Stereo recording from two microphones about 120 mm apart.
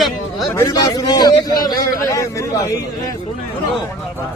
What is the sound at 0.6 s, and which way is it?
A man's voice, 30° left (ahead or behind).